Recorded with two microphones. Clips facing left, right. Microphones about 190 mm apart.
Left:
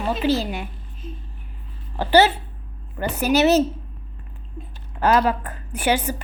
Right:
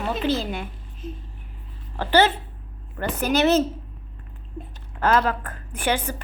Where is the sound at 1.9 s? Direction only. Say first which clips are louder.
Left 3 dB; 10° left (ahead or behind).